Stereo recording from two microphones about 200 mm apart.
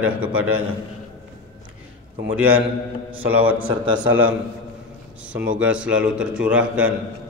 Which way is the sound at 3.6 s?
25° right (ahead or behind).